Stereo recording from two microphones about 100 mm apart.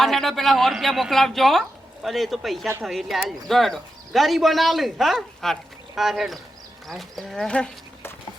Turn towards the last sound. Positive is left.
turn(degrees=5)  # may be behind; listen again after turning